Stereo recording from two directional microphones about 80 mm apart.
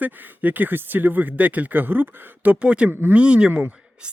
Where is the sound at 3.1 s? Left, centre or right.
Centre.